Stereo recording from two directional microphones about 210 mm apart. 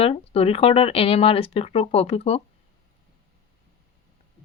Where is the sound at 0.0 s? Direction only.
30° left (ahead or behind).